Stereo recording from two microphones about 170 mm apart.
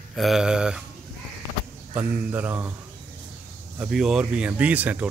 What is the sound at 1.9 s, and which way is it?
Speech, 10° right (ahead or behind).